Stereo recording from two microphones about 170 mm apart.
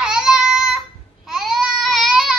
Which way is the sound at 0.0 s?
5° right (ahead or behind).